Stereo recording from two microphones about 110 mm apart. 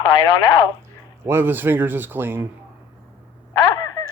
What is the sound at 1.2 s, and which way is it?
Speech, 20° right (ahead or behind).